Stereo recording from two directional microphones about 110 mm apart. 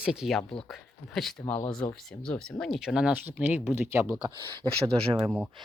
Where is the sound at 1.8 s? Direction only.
15° left (ahead or behind); by 4.1 s 25° right (ahead or behind).